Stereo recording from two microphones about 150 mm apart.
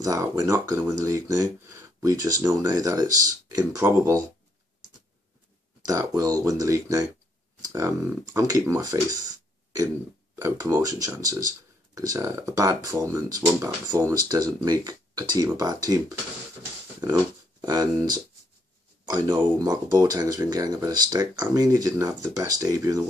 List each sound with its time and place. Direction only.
0.0 s speech: 20° right (ahead or behind)
5.9 s speech: 25° right (ahead or behind)
10.4 s speech: 20° right (ahead or behind)